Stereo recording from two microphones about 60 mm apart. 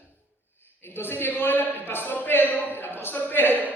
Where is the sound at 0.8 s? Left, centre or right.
Left.